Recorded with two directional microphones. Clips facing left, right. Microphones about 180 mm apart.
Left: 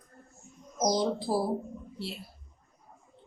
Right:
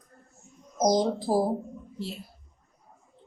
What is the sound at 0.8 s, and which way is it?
Speech, 45° right (ahead or behind).